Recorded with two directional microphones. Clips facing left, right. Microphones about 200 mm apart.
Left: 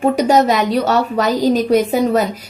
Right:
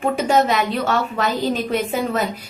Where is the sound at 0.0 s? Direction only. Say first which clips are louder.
Left 5 dB; 40° left (ahead or behind).